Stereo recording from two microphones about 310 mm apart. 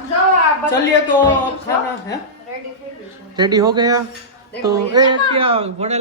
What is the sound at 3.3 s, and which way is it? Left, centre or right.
Speech, centre.